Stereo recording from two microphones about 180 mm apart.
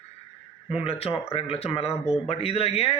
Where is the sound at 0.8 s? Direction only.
30° left (ahead or behind).